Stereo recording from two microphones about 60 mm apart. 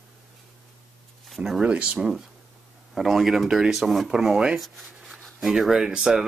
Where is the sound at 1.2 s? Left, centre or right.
Centre.